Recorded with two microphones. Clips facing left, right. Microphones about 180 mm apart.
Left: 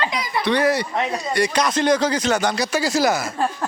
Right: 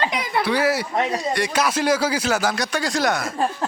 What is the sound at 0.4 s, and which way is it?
Speech, 5° right (ahead or behind).